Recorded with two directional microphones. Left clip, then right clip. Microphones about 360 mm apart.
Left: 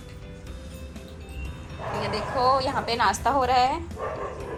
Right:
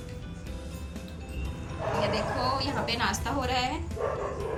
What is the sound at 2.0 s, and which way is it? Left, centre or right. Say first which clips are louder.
A woman's voice: left 7 dB; centre.